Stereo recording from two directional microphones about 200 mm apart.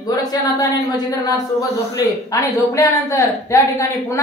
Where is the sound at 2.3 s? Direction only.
15° left (ahead or behind).